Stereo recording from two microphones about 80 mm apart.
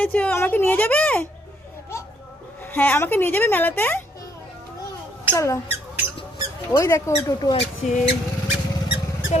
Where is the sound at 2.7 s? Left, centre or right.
Left.